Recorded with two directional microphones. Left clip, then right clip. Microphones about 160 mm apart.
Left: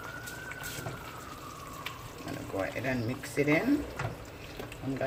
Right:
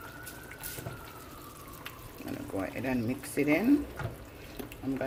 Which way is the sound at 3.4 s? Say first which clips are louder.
Left 1 dB; 50° right (ahead or behind).